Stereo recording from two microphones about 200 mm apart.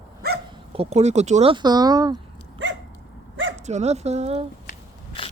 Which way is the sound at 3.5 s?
35° right (ahead or behind).